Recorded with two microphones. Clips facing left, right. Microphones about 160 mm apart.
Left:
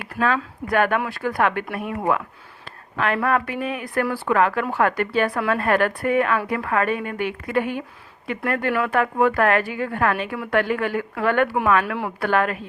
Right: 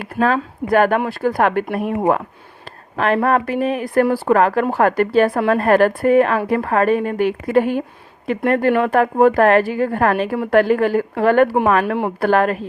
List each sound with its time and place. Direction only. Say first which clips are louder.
0.0 s a woman's voice: right 5 dB; 35° right (ahead or behind)
2.9 s a woman's voice: right 5 dB; 40° right (ahead or behind)